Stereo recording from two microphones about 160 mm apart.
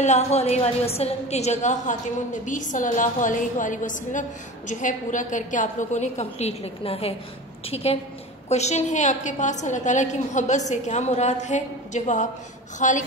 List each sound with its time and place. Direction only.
0.0 s a woman's voice: 45° left (ahead or behind)